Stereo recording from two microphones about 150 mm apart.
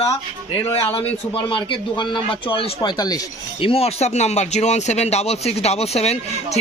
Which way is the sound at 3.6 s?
40° left (ahead or behind).